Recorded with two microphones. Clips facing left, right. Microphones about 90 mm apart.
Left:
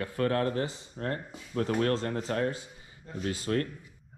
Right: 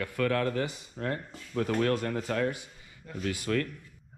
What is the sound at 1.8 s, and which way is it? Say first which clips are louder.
Speech: right 1 dB; 30° left (ahead or behind).